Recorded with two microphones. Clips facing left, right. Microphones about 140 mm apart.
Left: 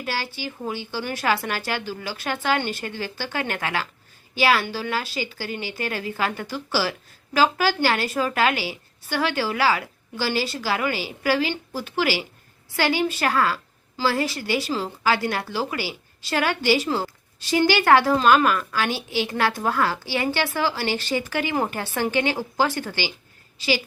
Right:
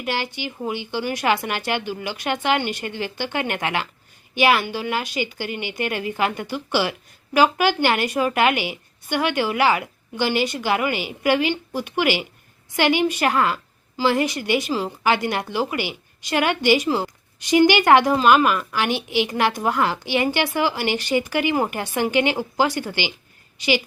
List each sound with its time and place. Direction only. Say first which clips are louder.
0.0 s a woman's voice: right 3 dB; 15° right (ahead or behind)